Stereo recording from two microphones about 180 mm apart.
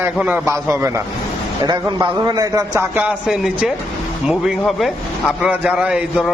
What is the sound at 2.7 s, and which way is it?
A man's voice, 5° right (ahead or behind).